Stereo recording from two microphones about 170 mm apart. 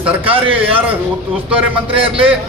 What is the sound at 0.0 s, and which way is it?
Speech, 10° right (ahead or behind).